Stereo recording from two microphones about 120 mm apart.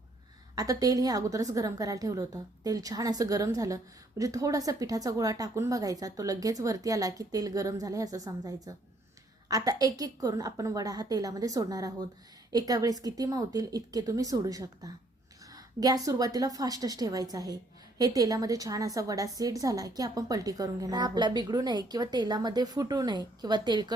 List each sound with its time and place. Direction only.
0.5 s a woman's voice: 30° right (ahead or behind)